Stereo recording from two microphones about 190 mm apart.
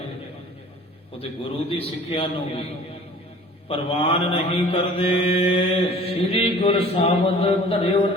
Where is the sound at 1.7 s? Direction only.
30° left (ahead or behind).